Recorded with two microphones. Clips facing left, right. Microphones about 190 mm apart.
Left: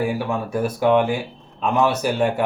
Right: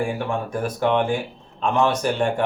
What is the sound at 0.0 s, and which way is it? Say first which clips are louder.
A man's voice: left 2 dB; 10° left (ahead or behind).